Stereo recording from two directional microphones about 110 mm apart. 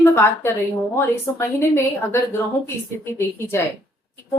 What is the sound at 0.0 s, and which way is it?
A woman's voice, 20° left (ahead or behind).